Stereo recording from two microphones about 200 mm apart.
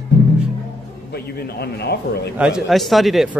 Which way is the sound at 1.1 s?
55° left (ahead or behind).